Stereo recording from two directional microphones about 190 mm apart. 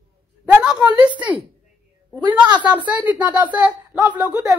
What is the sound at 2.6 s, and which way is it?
Speech, 10° right (ahead or behind).